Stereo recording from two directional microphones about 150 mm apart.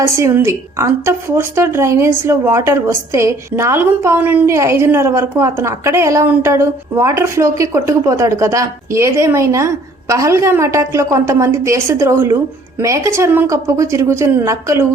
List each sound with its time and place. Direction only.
0.0 s a woman's voice: 20° right (ahead or behind)